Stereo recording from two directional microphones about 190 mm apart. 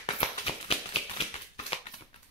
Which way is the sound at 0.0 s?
30° left (ahead or behind).